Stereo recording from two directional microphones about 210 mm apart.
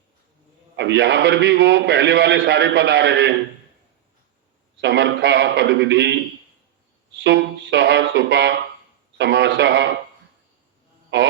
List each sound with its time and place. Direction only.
0.8 s a man's voice: 55° right (ahead or behind)
4.8 s a man's voice: 55° right (ahead or behind)
7.2 s a man's voice: 55° right (ahead or behind)